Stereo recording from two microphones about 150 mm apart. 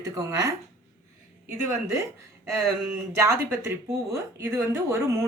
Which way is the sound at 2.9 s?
15° right (ahead or behind).